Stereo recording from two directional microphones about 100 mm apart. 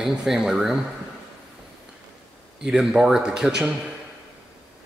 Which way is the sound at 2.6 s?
5° right (ahead or behind).